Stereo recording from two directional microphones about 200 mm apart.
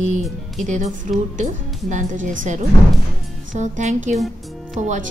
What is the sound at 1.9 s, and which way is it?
Speech, 35° right (ahead or behind).